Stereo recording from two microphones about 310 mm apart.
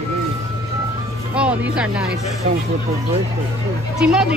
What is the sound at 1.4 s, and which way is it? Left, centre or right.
Speech, centre.